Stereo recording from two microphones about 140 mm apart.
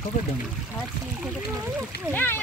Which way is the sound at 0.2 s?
65° left (ahead or behind).